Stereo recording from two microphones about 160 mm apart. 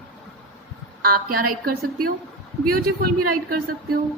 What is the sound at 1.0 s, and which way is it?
A woman's voice, 65° right (ahead or behind).